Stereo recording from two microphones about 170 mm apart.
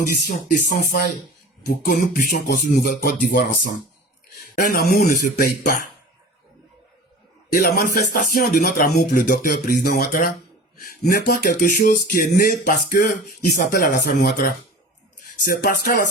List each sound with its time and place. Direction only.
0.0 s speech: 55° left (ahead or behind)
7.5 s speech: 60° left (ahead or behind)